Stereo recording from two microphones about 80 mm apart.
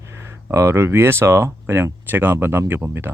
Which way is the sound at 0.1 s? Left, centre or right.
Right.